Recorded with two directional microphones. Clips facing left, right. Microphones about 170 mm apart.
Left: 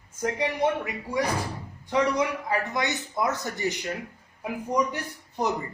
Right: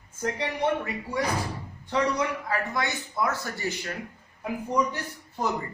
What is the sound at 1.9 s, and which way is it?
Speech, 15° left (ahead or behind).